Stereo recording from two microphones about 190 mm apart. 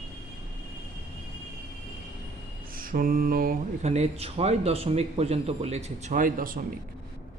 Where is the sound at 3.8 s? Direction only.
35° right (ahead or behind).